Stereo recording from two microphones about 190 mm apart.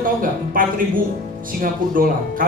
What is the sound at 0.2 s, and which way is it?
Speech, 45° right (ahead or behind).